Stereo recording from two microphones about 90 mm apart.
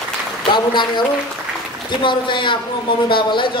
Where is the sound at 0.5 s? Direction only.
60° left (ahead or behind).